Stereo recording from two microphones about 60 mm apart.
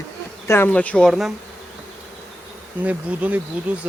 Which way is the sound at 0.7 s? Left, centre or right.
Left.